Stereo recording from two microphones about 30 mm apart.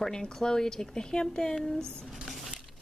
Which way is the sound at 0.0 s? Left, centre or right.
Centre.